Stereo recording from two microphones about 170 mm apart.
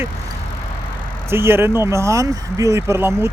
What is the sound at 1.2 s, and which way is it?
Speech, 15° right (ahead or behind).